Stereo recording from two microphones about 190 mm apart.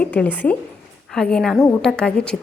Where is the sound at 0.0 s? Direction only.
5° left (ahead or behind).